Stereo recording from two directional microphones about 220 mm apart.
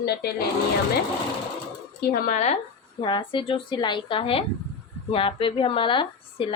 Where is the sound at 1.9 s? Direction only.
40° left (ahead or behind).